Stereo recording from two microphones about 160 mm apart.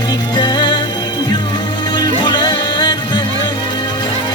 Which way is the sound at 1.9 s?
25° left (ahead or behind).